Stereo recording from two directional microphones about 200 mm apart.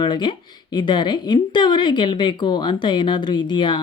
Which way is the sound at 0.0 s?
25° left (ahead or behind).